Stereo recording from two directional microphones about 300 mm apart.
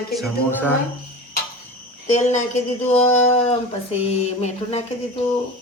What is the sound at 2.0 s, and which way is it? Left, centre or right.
Speech, left.